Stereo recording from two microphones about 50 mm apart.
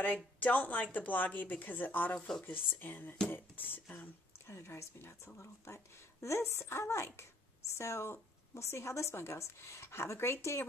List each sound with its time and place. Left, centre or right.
0.0 s speech: left
2.1 s speech: centre
2.4 s speech: left
4.5 s a woman's voice: left